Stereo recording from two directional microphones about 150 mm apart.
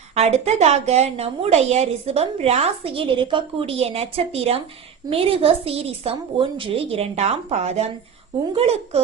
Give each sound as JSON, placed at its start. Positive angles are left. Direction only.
{"t": 0.1, "sound": "a woman's voice", "side_deg": -45}